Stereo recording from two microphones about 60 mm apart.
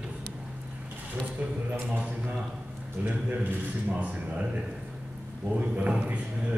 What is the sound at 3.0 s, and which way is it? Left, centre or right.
A man's voice, right.